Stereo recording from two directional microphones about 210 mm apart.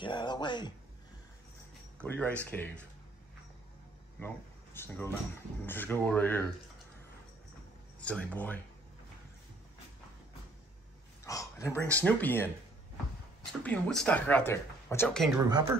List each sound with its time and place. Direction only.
0.0 s speech: 20° left (ahead or behind)
2.0 s speech: 5° left (ahead or behind)
4.2 s speech: 10° left (ahead or behind)
8.0 s speech: 5° left (ahead or behind)
11.2 s speech: 15° left (ahead or behind)
13.5 s speech: 5° left (ahead or behind)